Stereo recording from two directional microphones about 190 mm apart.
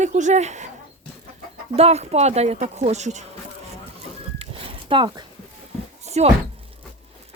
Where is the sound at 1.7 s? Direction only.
35° right (ahead or behind).